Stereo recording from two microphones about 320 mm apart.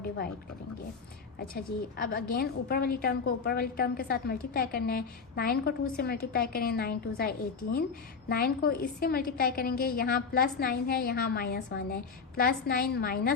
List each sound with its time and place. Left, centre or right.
1.4 s a woman's voice: left